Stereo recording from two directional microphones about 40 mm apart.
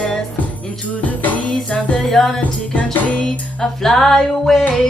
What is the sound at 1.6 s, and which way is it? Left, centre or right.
Music, left.